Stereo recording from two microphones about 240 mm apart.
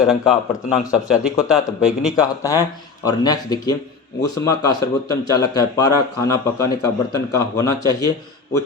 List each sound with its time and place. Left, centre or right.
0.0 s speech: centre
2.4 s a man's voice: centre